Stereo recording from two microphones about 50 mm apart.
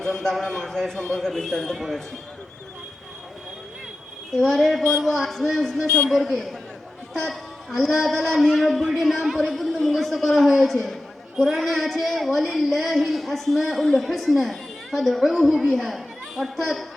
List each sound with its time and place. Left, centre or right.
0.0 s a man's voice: centre
4.4 s a man's voice: centre
4.8 s a man's voice: centre
5.1 s a woman's voice: centre